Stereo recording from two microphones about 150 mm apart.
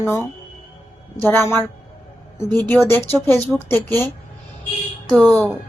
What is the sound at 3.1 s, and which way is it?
Speech, 15° left (ahead or behind).